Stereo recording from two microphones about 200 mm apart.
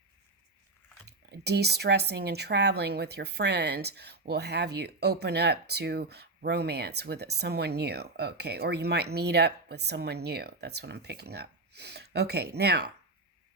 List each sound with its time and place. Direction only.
1.0 s speech: 55° right (ahead or behind)